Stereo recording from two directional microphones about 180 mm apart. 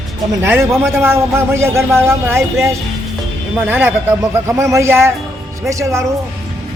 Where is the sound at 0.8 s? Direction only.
15° right (ahead or behind).